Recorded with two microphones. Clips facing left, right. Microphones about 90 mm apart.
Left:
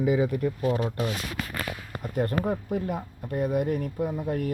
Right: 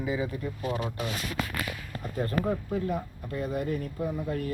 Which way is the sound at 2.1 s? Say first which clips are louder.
Left 2 dB; 65° left (ahead or behind).